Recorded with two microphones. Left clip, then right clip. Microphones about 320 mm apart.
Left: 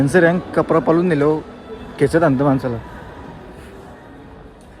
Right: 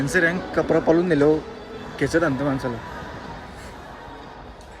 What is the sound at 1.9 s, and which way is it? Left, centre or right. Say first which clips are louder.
Speech: left 6 dB; centre.